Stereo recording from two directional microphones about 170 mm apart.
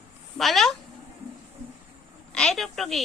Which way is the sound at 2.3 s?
5° left (ahead or behind).